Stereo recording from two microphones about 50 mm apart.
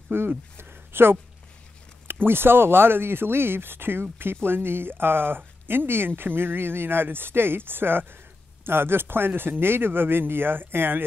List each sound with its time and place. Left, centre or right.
0.1 s speech: right
0.6 s a sound: right
2.2 s speech: right